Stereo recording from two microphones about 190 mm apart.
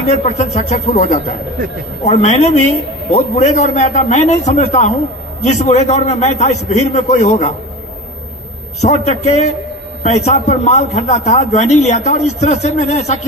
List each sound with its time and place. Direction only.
0.1 s a man's voice: 35° left (ahead or behind)
8.8 s a man's voice: 35° left (ahead or behind)